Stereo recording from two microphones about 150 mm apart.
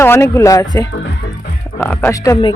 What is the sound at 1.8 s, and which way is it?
Speech, 10° left (ahead or behind).